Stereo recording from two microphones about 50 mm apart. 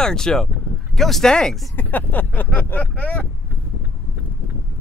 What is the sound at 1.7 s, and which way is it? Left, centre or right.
Vehicle, left.